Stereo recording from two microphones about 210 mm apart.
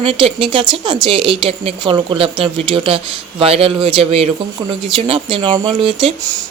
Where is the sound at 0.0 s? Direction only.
25° right (ahead or behind).